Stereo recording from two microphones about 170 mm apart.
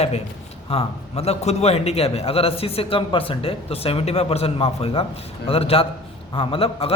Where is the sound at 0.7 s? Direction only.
35° left (ahead or behind).